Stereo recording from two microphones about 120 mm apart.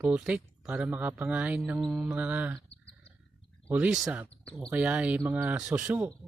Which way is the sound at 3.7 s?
5° right (ahead or behind).